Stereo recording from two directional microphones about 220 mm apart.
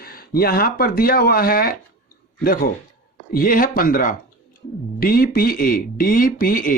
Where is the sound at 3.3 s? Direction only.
40° left (ahead or behind).